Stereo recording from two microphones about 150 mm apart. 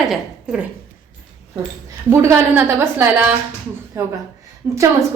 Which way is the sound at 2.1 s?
20° right (ahead or behind).